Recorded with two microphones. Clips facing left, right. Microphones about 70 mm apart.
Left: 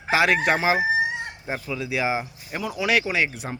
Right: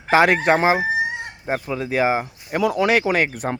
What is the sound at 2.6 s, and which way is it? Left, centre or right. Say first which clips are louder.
Speech: right 10 dB; right.